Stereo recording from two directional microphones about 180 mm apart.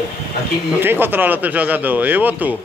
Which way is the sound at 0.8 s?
10° right (ahead or behind).